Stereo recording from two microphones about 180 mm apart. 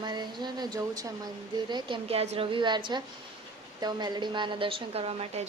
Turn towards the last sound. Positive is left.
turn(degrees=-35)  # may be behind; listen again after turning